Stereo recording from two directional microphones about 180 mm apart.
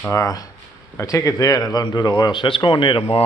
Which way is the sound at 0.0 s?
15° left (ahead or behind).